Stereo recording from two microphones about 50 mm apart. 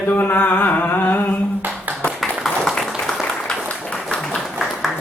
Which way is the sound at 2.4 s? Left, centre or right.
Centre.